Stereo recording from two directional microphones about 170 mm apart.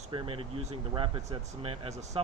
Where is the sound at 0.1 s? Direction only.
35° right (ahead or behind).